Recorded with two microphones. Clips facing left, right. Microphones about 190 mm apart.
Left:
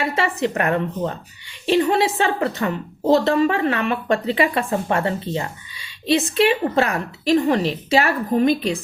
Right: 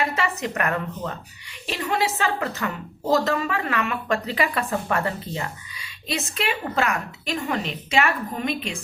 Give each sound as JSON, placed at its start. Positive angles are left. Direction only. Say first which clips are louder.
{"t": 0.0, "sound": "a woman's voice", "louder": "left 4 dB", "side_deg": 30}